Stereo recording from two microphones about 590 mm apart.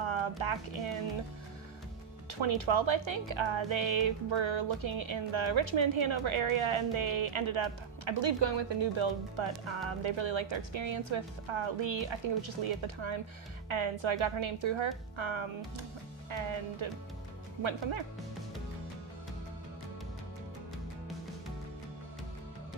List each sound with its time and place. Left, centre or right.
0.0 s a sound: right
0.4 s speech: right
2.4 s speech: right